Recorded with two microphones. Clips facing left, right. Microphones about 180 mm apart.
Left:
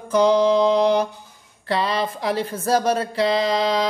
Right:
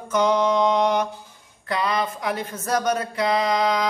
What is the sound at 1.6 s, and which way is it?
Speech, 30° left (ahead or behind).